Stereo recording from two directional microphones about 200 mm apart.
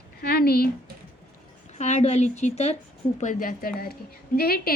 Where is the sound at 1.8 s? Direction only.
35° left (ahead or behind).